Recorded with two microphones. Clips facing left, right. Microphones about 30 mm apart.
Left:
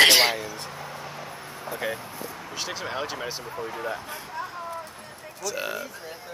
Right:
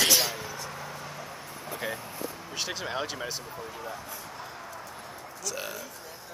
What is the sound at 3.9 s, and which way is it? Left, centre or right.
Speech, left.